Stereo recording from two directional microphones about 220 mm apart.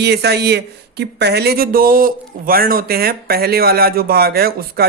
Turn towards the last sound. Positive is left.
turn(degrees=-45)  # may be behind; listen again after turning